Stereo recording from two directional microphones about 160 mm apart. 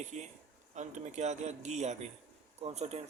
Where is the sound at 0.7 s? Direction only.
50° right (ahead or behind).